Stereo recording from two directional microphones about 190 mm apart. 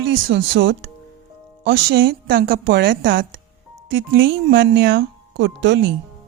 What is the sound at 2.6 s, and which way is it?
Speech, 70° right (ahead or behind).